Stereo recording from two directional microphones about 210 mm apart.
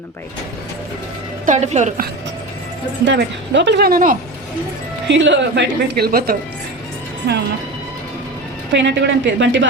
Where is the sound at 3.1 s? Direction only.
60° right (ahead or behind); by 4.2 s 40° right (ahead or behind).